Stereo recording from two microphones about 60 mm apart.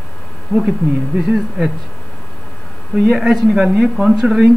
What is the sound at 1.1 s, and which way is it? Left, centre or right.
Speech, centre.